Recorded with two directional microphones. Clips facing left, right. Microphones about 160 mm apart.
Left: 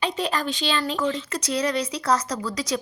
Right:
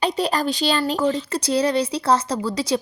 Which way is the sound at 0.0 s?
35° right (ahead or behind).